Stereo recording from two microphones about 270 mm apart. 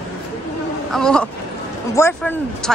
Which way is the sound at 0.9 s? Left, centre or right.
Centre.